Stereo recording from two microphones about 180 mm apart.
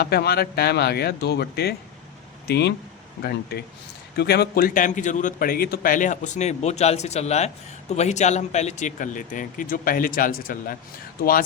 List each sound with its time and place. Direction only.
0.0 s speech: 60° left (ahead or behind)
4.2 s a man's voice: 65° left (ahead or behind)